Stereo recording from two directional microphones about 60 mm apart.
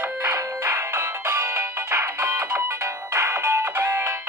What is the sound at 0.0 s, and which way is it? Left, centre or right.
Music, right.